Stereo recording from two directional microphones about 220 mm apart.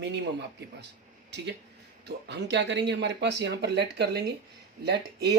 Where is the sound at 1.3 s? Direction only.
50° right (ahead or behind).